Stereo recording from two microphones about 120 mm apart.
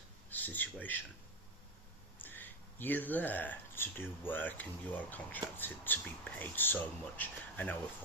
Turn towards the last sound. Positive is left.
turn(degrees=15)  # may be behind; listen again after turning